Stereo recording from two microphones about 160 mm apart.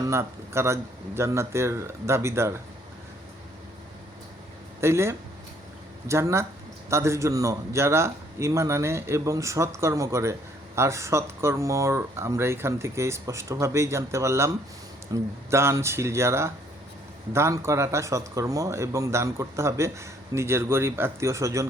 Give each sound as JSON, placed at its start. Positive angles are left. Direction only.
{"t": 0.0, "sound": "speech", "side_deg": -15}
{"t": 4.8, "sound": "speech", "side_deg": -15}